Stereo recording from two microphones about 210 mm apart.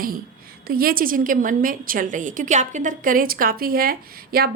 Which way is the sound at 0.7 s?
45° right (ahead or behind).